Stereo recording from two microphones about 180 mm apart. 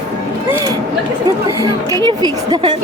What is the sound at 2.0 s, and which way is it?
Speech, 25° right (ahead or behind).